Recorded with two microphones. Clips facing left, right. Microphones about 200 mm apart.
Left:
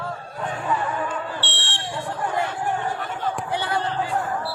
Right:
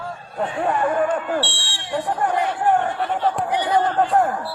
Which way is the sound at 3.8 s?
50° right (ahead or behind).